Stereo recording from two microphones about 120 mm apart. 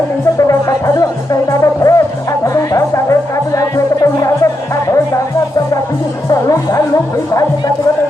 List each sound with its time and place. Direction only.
0.9 s music: 30° left (ahead or behind)
6.3 s music: 30° left (ahead or behind)